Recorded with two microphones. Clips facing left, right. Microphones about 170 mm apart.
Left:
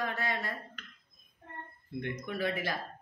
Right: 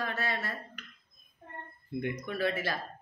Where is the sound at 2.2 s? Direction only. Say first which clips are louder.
Even; 15° left (ahead or behind).